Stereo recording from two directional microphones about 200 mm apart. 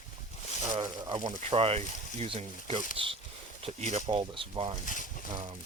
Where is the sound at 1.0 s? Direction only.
20° right (ahead or behind).